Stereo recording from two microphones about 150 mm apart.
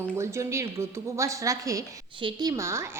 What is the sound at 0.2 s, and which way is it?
A woman's voice, 20° right (ahead or behind).